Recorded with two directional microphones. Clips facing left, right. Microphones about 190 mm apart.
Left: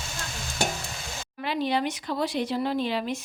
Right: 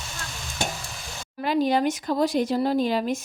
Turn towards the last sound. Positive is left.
turn(degrees=-45)  # may be behind; listen again after turning